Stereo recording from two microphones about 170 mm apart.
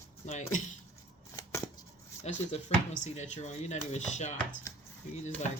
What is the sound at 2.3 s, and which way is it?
Speech, 40° left (ahead or behind).